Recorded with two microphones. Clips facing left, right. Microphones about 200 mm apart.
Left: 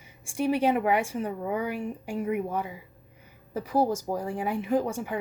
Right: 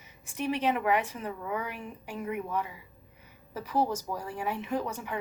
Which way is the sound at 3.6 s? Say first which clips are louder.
Left 4 dB; 40° left (ahead or behind).